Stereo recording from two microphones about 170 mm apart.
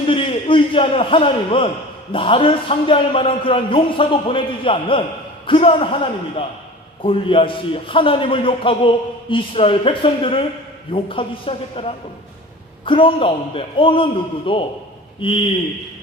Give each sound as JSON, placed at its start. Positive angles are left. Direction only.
{"t": 0.1, "sound": "a man's voice", "side_deg": 30}